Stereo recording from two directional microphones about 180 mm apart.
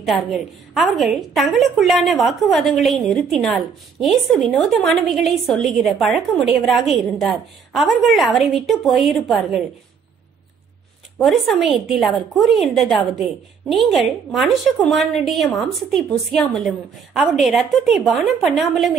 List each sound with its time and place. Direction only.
0.7 s a woman's voice: centre (ahead or behind)
11.1 s a woman's voice: centre (ahead or behind)